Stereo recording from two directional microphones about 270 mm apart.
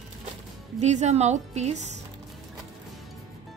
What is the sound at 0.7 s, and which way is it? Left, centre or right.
A woman's voice, right.